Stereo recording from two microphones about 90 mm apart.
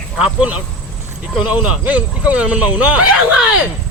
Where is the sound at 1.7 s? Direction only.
15° right (ahead or behind).